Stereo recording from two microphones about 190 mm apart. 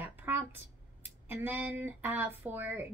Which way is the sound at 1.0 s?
10° right (ahead or behind).